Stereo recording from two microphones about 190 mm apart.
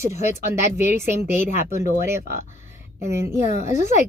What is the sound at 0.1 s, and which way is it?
A woman's voice, 40° left (ahead or behind).